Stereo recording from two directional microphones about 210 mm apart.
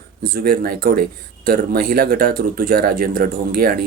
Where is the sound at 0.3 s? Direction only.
45° right (ahead or behind).